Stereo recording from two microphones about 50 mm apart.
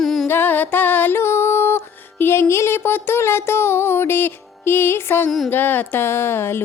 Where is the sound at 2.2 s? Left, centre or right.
Left.